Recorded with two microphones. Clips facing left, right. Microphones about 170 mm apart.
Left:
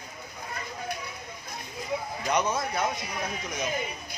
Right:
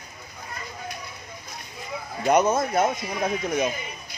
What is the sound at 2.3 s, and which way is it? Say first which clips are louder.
Speech: right 7 dB; 50° right (ahead or behind).